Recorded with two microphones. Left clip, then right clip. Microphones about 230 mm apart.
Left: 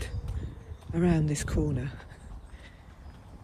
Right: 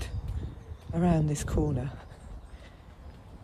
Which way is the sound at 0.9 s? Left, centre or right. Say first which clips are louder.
Even; centre.